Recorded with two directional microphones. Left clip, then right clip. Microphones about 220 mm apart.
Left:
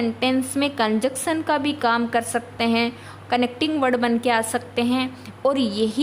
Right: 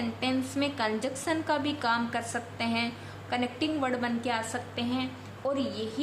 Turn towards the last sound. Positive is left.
turn(degrees=70)  # may be behind; listen again after turning